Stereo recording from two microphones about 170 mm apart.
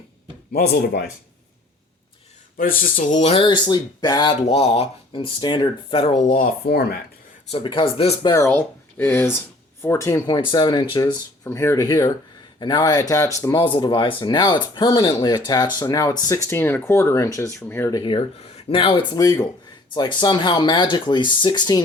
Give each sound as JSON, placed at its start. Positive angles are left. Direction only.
{"t": 0.5, "sound": "speech", "side_deg": 65}
{"t": 2.6, "sound": "speech", "side_deg": 55}
{"t": 3.2, "sound": "speech", "side_deg": 35}
{"t": 6.2, "sound": "speech", "side_deg": 55}
{"t": 7.5, "sound": "speech", "side_deg": 30}
{"t": 13.6, "sound": "speech", "side_deg": 30}
{"t": 18.0, "sound": "speech", "side_deg": 30}